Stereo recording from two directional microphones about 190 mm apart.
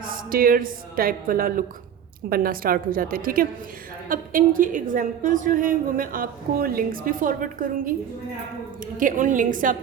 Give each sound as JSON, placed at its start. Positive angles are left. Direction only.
{"t": 0.1, "sound": "a woman's voice", "side_deg": -50}
{"t": 9.0, "sound": "a woman's voice", "side_deg": -45}